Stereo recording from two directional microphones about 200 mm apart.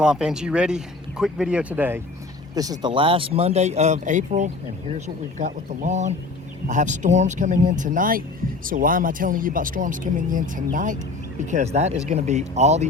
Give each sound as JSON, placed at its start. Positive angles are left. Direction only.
{"t": 0.0, "sound": "speech", "side_deg": -5}
{"t": 2.6, "sound": "speech", "side_deg": -20}